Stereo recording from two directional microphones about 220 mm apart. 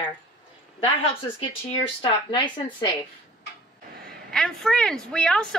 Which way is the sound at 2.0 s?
20° left (ahead or behind).